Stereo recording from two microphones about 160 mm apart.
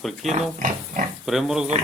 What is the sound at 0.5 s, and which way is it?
Pig, 55° right (ahead or behind).